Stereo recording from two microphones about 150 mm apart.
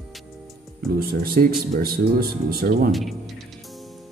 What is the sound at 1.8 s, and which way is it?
Speech, 90° right.